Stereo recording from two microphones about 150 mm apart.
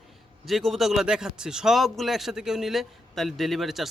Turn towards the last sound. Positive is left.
turn(degrees=0)  # may be behind; listen again after turning